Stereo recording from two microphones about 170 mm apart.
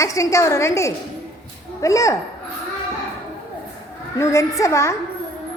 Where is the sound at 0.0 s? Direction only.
20° left (ahead or behind).